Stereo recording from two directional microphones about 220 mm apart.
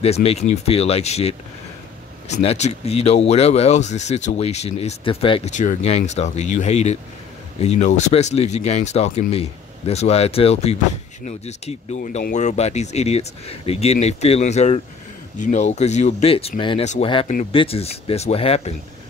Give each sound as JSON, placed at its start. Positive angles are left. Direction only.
{"t": 0.0, "sound": "speech", "side_deg": 25}